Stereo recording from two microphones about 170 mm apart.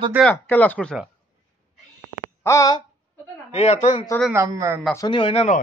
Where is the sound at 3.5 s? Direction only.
40° left (ahead or behind).